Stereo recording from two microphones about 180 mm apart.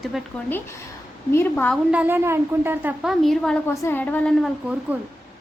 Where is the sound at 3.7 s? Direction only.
15° left (ahead or behind).